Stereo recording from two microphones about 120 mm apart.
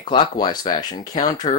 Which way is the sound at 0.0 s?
40° left (ahead or behind).